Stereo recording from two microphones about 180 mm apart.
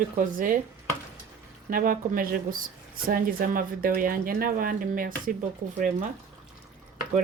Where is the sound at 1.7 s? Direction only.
50° right (ahead or behind).